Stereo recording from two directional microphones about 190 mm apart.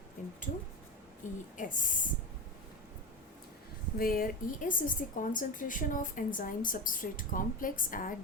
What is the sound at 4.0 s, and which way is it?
Speech, 50° left (ahead or behind).